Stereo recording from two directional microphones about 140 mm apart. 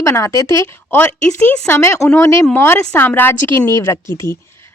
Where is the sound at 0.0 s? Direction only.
20° left (ahead or behind).